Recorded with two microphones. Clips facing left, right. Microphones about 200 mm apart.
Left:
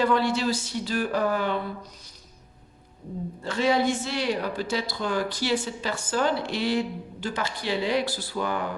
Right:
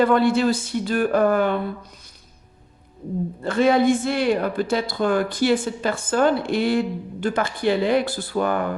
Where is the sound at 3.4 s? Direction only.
55° right (ahead or behind).